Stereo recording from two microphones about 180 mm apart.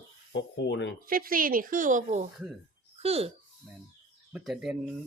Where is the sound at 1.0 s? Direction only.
50° right (ahead or behind); by 3.3 s 35° right (ahead or behind).